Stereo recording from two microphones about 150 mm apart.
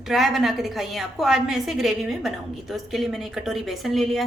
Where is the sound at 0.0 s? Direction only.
Centre (ahead or behind).